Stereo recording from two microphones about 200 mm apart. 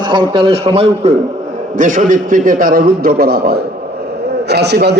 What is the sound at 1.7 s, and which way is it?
A man's voice, 40° right (ahead or behind).